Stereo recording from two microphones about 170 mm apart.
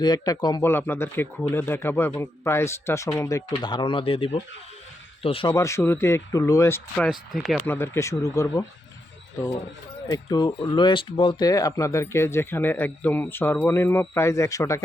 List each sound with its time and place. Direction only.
0.0 s speech: 25° left (ahead or behind)
5.5 s speech: 15° left (ahead or behind); by 7.6 s centre (ahead or behind)
7.7 s speech: 15° left (ahead or behind)
10.1 s speech: 25° left (ahead or behind)